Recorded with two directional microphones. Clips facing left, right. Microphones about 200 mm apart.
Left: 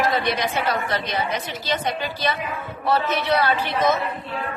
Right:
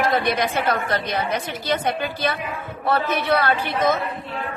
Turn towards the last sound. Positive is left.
turn(degrees=-50)  # may be behind; listen again after turning